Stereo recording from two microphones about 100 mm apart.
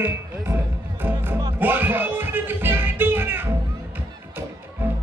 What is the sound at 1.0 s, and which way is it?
Music, 20° right (ahead or behind).